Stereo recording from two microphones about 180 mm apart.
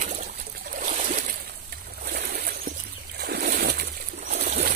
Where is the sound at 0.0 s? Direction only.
40° right (ahead or behind).